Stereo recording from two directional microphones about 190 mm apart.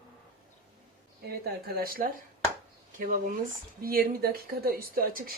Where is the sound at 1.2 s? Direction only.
55° right (ahead or behind).